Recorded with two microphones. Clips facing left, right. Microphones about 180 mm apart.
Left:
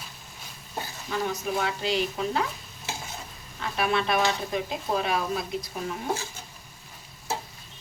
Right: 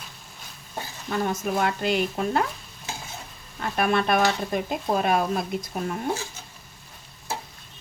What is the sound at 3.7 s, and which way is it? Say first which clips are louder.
Speech: right 3 dB; 50° right (ahead or behind).